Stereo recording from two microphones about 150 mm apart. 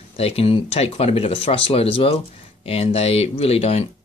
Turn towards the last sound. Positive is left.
turn(degrees=40)  # may be behind; listen again after turning